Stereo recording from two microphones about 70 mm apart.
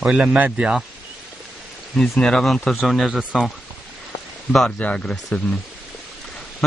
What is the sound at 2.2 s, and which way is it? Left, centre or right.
Speech, centre.